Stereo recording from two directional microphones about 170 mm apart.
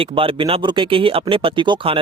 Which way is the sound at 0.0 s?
30° right (ahead or behind).